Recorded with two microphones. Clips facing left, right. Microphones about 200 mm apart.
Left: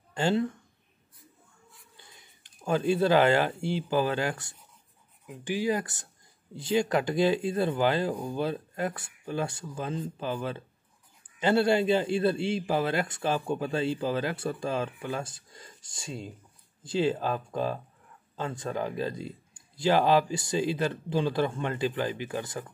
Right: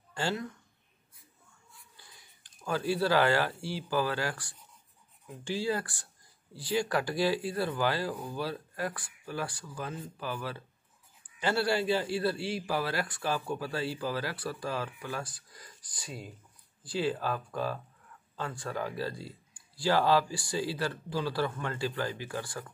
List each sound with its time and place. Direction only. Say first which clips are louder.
0.1 s speech: left 7 dB; 25° left (ahead or behind)
2.0 s a sound: left 3 dB; 20° left (ahead or behind)
3.6 s a man's voice: left 4 dB; 20° left (ahead or behind)